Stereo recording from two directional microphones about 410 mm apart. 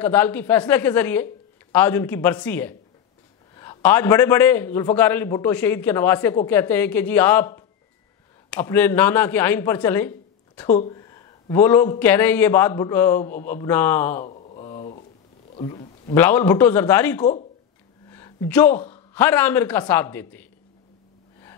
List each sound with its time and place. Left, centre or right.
0.0 s a man's voice: centre
14.2 s a sound: centre
15.5 s a man's voice: centre